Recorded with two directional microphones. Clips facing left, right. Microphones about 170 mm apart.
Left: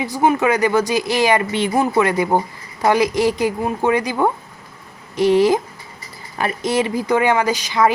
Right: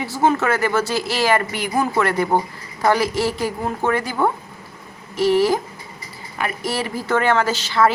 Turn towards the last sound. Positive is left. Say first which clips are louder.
# left 1 dB
turn(degrees=15)  # may be behind; listen again after turning